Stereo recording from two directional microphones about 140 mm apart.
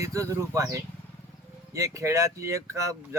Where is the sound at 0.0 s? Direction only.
25° right (ahead or behind).